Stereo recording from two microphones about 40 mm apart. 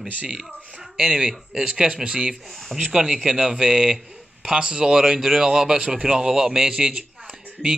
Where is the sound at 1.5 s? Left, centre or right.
Centre.